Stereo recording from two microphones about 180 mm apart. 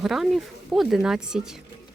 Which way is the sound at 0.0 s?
Centre (ahead or behind).